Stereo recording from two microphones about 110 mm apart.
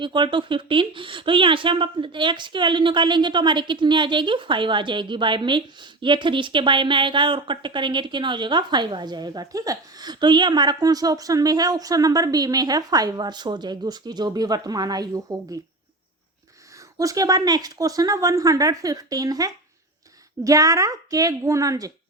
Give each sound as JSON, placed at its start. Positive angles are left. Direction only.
{"t": 0.0, "sound": "a woman's voice", "side_deg": -45}
{"t": 17.0, "sound": "speech", "side_deg": -30}